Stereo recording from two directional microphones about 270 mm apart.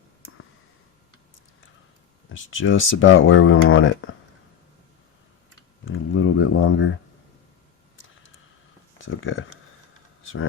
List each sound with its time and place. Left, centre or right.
2.3 s speech: left
5.8 s a sound: left
9.0 s speech: left